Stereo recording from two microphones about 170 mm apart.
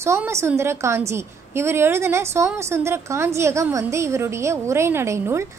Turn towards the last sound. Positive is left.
turn(degrees=-15)  # may be behind; listen again after turning